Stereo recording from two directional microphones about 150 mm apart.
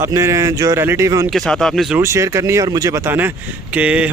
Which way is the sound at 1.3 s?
5° left (ahead or behind).